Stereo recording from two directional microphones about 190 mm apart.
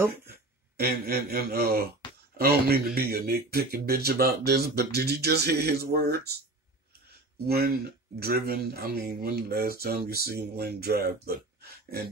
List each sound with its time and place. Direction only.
0.7 s speech: 55° right (ahead or behind)
7.4 s speech: 55° right (ahead or behind)